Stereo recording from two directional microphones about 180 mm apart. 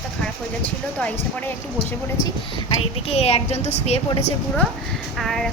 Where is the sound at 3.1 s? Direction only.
35° left (ahead or behind).